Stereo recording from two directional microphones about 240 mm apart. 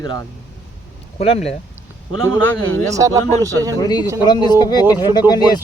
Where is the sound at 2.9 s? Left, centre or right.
Centre.